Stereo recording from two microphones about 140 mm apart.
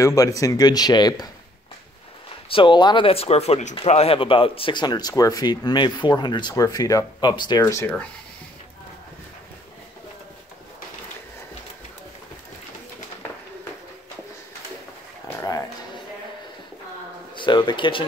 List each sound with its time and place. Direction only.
0.0 s speech: 25° left (ahead or behind)
2.5 s speech: 35° left (ahead or behind)
17.4 s speech: 35° left (ahead or behind)